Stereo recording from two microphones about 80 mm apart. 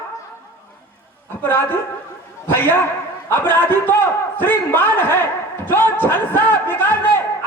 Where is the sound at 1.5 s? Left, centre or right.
Left.